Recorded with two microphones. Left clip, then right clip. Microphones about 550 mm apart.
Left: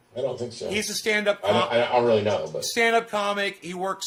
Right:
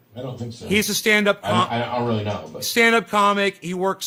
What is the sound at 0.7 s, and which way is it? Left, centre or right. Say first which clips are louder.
Speech: right 7 dB; right.